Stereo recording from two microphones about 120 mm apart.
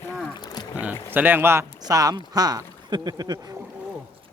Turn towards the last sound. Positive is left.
turn(degrees=-30)  # may be behind; listen again after turning